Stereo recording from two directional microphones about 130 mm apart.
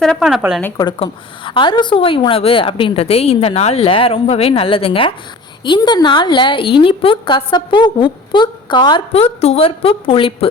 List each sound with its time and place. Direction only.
0.0 s speech: centre (ahead or behind)
0.9 s a woman's voice: 40° left (ahead or behind)
9.4 s a woman's voice: 50° left (ahead or behind)